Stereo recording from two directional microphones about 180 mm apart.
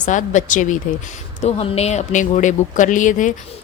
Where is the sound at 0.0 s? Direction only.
45° left (ahead or behind).